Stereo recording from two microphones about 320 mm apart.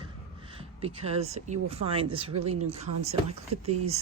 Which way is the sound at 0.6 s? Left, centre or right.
Centre.